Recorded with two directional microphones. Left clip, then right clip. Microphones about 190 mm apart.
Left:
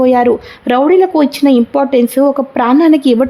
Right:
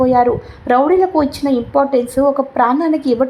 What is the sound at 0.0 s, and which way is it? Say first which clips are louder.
A woman's voice: left 3 dB; 35° left (ahead or behind).